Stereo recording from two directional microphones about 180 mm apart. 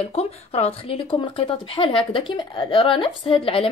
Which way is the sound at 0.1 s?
35° left (ahead or behind).